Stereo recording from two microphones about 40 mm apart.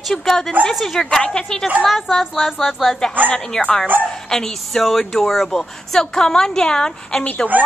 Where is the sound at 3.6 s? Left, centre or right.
Left.